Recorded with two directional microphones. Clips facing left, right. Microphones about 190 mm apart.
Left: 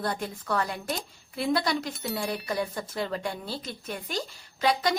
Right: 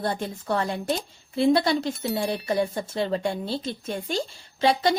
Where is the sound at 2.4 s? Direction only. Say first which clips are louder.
Right 6 dB; 25° right (ahead or behind).